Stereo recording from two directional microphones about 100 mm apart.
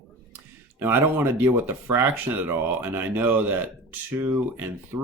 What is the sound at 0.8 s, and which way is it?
Speech, 20° right (ahead or behind).